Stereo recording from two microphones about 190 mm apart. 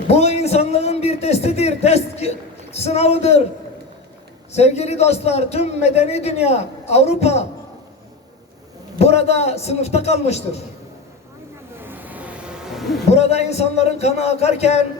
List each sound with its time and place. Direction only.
0.1 s a sound: 35° left (ahead or behind)
2.7 s a man's voice: 35° left (ahead or behind)
4.5 s a man's voice: 35° left (ahead or behind)
9.0 s a man's voice: 35° left (ahead or behind)
11.8 s a sound: 10° right (ahead or behind)
13.1 s a man's voice: 35° left (ahead or behind)